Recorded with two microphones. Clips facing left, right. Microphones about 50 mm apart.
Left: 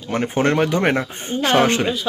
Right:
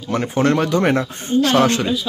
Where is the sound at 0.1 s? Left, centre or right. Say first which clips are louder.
Right 1 dB; left.